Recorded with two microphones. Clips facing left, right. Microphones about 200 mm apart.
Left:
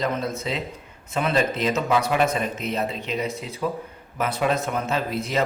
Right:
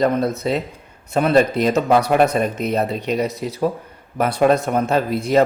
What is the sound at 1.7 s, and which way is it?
Speech, 55° right (ahead or behind).